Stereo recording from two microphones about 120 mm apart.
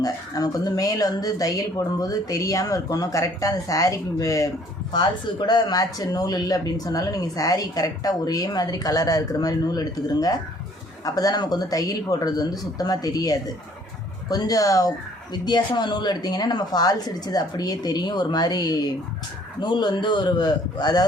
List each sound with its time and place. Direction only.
0.0 s speech: 30° left (ahead or behind)